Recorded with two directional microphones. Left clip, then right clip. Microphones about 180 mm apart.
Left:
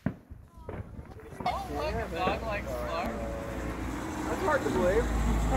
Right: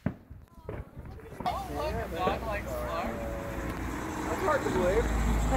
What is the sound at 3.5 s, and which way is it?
Vehicle, 40° left (ahead or behind).